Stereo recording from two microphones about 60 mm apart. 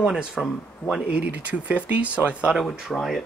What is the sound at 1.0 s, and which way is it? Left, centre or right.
Speech, right.